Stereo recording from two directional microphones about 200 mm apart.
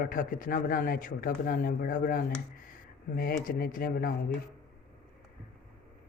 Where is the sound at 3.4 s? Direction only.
45° left (ahead or behind).